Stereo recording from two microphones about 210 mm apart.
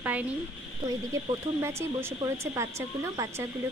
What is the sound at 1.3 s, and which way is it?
Speech, 10° right (ahead or behind).